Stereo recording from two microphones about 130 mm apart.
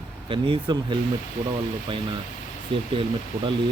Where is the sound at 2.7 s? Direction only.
40° right (ahead or behind).